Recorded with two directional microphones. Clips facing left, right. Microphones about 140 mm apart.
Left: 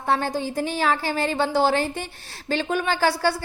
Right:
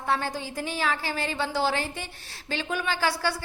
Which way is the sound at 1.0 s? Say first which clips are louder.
Left 6 dB; 40° left (ahead or behind).